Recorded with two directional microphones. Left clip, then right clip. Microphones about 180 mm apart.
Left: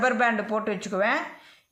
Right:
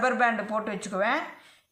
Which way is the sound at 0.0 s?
40° left (ahead or behind).